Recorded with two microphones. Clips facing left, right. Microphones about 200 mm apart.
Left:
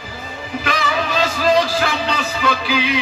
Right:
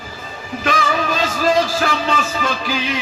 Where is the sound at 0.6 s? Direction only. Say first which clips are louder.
Right 3 dB; 45° right (ahead or behind).